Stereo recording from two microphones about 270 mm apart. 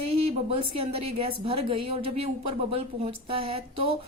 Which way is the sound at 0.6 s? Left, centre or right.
Right.